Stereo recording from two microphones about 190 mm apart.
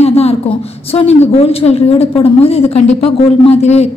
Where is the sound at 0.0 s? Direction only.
35° left (ahead or behind).